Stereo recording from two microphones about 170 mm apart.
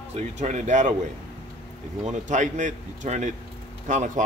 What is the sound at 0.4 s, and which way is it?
Speech, 45° right (ahead or behind).